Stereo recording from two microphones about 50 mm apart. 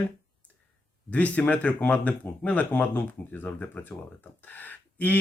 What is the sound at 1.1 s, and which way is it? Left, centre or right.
Speech, left.